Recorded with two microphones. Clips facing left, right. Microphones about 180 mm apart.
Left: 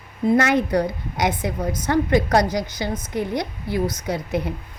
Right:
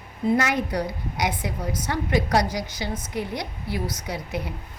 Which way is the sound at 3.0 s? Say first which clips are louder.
Left 7 dB; 20° left (ahead or behind).